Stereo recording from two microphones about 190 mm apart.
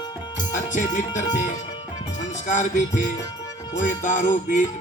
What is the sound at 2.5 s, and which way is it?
Music, 40° left (ahead or behind).